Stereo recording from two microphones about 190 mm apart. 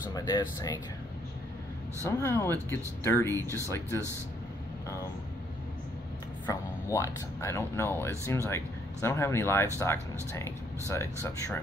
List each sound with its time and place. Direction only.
0.1 s speech: 20° left (ahead or behind)
2.0 s speech: 15° left (ahead or behind)
3.4 s speech: 15° right (ahead or behind)
4.8 s vehicle: 15° left (ahead or behind)
6.4 s speech: 15° left (ahead or behind)